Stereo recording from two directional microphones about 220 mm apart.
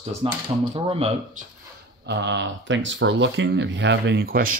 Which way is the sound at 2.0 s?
50° right (ahead or behind).